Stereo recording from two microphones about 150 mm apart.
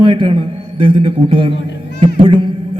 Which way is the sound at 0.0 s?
35° right (ahead or behind).